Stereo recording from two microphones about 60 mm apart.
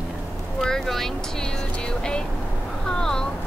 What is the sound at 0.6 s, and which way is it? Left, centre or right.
Vehicle, centre.